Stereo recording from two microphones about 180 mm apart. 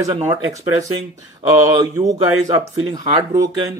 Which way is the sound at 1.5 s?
20° right (ahead or behind).